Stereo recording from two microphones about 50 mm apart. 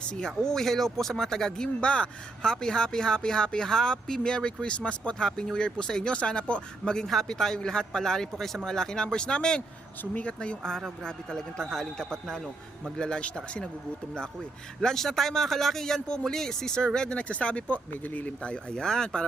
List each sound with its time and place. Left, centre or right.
0.2 s speech: centre
9.6 s speech: left
14.8 s speech: centre